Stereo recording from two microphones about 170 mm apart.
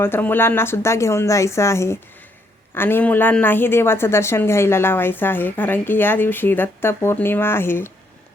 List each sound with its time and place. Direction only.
0.0 s a woman's voice: 10° left (ahead or behind)